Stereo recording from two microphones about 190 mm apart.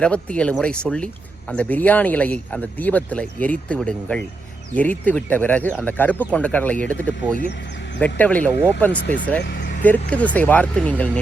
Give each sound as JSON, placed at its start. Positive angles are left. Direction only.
{"t": 0.0, "sound": "speech", "side_deg": 5}
{"t": 9.5, "sound": "vehicle", "side_deg": 50}
{"t": 9.8, "sound": "speech", "side_deg": 10}